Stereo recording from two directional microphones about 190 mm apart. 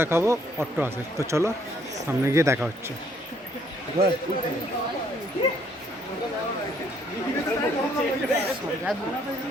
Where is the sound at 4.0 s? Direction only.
30° right (ahead or behind).